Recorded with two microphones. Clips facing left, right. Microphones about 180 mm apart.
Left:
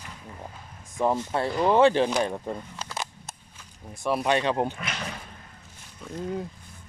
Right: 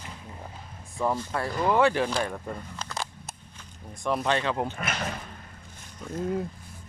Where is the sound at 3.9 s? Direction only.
10° left (ahead or behind).